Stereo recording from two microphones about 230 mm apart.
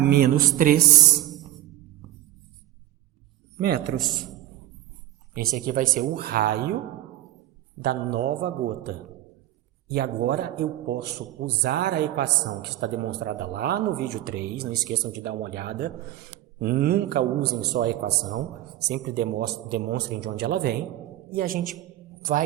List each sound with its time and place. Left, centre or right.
0.1 s speech: right
3.6 s a man's voice: right
5.6 s a man's voice: right
7.8 s a man's voice: right